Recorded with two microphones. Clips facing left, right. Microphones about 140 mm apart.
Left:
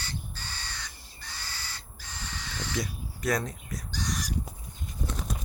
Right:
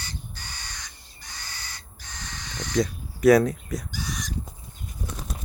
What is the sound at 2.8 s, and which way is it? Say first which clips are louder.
Speech: right 13 dB; 50° right (ahead or behind).